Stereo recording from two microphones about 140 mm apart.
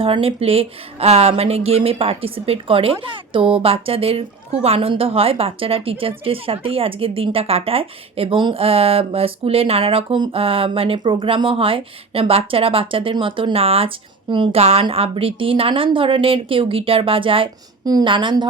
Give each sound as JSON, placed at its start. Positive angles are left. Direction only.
{"t": 0.0, "sound": "a woman's voice", "side_deg": -40}